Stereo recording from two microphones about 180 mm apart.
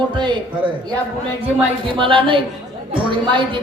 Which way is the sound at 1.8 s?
30° right (ahead or behind).